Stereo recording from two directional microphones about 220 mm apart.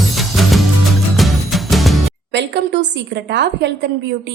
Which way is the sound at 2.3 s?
50° right (ahead or behind).